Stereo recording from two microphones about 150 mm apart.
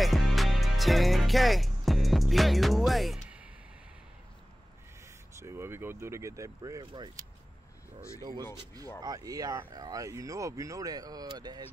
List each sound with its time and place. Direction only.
0.0 s music: centre (ahead or behind)
5.4 s speech: 15° right (ahead or behind)
8.5 s speech: 25° right (ahead or behind)